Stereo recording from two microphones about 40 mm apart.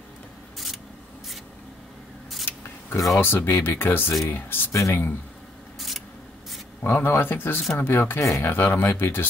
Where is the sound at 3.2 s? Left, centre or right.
Left.